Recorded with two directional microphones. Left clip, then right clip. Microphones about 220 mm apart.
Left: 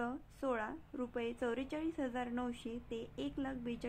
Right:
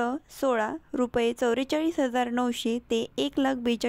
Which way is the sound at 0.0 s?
40° right (ahead or behind).